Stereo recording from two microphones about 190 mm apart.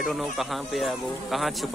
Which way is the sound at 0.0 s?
Centre (ahead or behind).